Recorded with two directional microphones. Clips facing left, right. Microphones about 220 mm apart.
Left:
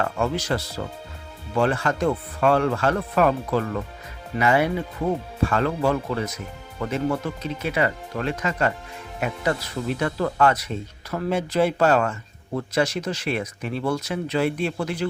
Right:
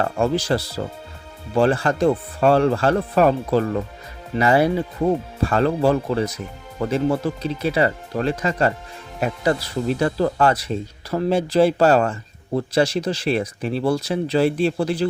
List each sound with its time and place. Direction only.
0.0 s speech: 30° right (ahead or behind)